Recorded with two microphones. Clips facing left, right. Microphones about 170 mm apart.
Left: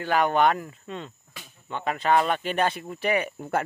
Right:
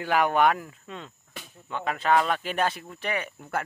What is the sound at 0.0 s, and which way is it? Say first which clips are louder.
Speech: left 1 dB; 5° right (ahead or behind).